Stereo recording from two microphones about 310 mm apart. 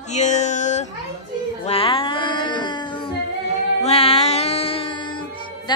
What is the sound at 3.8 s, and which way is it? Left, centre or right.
Music, centre.